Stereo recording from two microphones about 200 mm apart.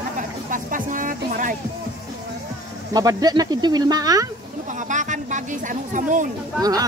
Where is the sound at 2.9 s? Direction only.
20° right (ahead or behind).